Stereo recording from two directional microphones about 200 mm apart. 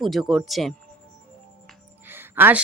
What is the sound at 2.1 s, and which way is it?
Music, 10° right (ahead or behind).